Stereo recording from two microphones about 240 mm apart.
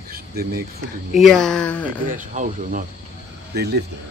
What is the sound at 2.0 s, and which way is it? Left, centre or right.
Speech, right.